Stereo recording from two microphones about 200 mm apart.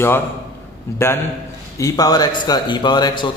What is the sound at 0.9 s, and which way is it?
A man's voice, 10° left (ahead or behind).